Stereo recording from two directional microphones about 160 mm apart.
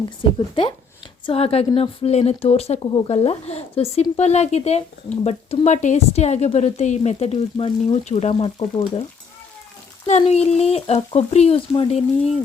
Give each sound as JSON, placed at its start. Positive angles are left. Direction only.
{"t": 0.3, "sound": "speech", "side_deg": 30}
{"t": 10.1, "sound": "speech", "side_deg": 40}